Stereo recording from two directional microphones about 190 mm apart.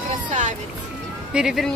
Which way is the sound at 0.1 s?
40° right (ahead or behind).